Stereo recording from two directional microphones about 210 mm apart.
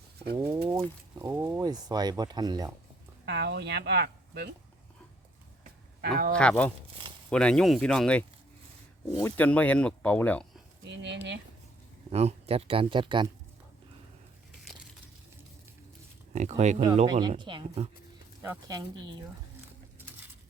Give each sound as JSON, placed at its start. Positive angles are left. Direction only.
{"t": 0.3, "sound": "speech", "side_deg": -15}
{"t": 3.2, "sound": "speech", "side_deg": -55}
{"t": 6.0, "sound": "speech", "side_deg": -45}
{"t": 6.3, "sound": "speech", "side_deg": 5}
{"t": 10.8, "sound": "speech", "side_deg": -60}
{"t": 12.1, "sound": "speech", "side_deg": -30}
{"t": 16.3, "sound": "speech", "side_deg": -35}